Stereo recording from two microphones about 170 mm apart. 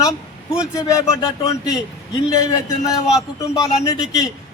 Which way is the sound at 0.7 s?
20° left (ahead or behind).